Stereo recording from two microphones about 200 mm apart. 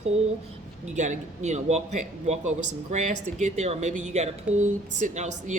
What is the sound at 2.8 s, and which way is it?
Speech, 40° right (ahead or behind).